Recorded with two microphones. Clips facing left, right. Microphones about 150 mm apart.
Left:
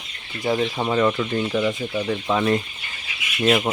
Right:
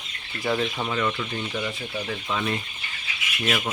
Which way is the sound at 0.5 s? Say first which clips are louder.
Left 5 dB; 35° left (ahead or behind).